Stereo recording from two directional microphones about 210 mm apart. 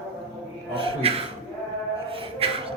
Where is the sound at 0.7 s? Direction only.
25° right (ahead or behind).